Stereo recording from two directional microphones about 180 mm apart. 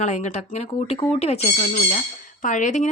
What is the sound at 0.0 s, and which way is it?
Speech, 40° left (ahead or behind).